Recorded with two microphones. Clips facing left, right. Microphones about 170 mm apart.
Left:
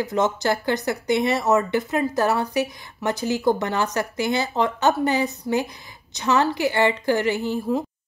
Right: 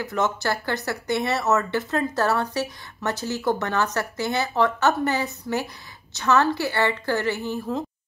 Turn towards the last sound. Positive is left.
turn(degrees=15)  # may be behind; listen again after turning